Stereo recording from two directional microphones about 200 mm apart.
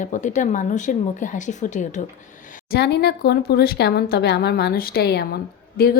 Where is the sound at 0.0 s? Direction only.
40° left (ahead or behind).